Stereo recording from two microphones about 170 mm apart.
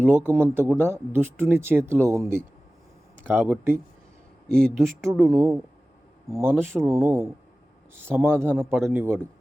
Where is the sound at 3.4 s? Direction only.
10° right (ahead or behind).